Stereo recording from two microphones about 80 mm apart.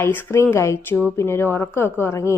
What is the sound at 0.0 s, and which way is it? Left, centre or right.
A woman's voice, left.